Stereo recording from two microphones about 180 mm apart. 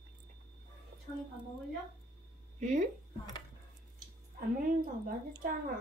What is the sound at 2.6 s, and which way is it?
Speech, 40° right (ahead or behind).